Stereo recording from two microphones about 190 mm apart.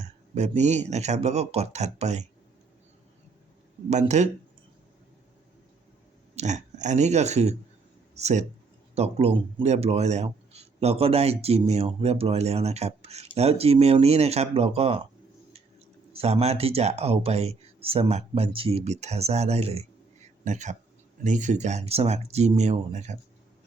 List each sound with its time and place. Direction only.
0.0 s speech: 35° right (ahead or behind)
3.8 s speech: 35° right (ahead or behind)
6.3 s speech: 40° right (ahead or behind)
16.1 s speech: 35° right (ahead or behind)